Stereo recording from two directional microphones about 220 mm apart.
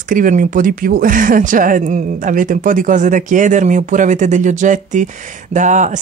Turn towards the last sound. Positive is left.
turn(degrees=-35)  # may be behind; listen again after turning